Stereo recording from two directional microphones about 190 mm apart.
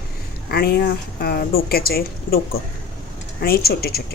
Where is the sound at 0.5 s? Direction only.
55° left (ahead or behind).